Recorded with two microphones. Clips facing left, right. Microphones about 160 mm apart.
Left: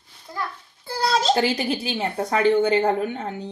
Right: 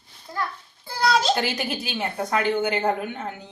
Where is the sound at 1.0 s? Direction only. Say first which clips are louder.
Left 1 dB; 35° left (ahead or behind).